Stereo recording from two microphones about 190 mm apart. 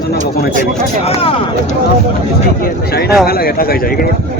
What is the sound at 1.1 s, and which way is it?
Speech, 30° left (ahead or behind).